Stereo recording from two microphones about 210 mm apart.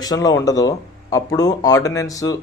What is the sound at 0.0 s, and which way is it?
Speech, 15° left (ahead or behind).